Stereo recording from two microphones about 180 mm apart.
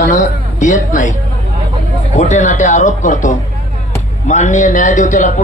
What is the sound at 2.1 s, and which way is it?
A man's voice, 45° left (ahead or behind).